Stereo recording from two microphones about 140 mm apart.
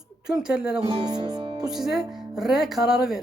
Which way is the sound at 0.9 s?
30° right (ahead or behind).